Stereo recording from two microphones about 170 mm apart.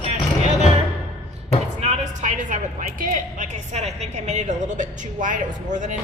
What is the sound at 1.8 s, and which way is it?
A woman's voice, 45° right (ahead or behind).